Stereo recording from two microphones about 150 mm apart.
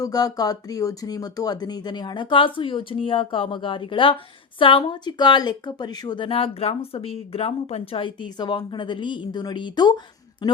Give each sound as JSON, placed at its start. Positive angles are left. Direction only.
{"t": 0.0, "sound": "a woman's voice", "side_deg": 25}